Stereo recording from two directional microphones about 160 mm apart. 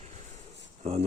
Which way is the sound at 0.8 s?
40° right (ahead or behind).